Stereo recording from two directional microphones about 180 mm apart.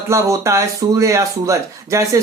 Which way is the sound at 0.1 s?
15° right (ahead or behind).